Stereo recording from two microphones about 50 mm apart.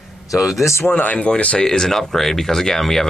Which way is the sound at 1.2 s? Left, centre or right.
Left.